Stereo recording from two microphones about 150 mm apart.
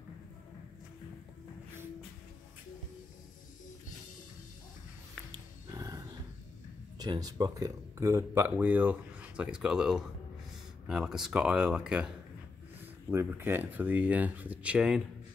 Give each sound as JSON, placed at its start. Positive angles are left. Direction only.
{"t": 5.3, "sound": "music", "side_deg": -25}
{"t": 7.0, "sound": "speech", "side_deg": -25}